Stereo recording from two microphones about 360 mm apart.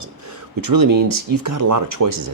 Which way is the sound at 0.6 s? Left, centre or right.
Right.